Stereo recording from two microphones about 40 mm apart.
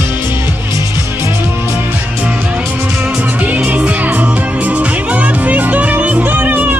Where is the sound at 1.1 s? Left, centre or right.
Right.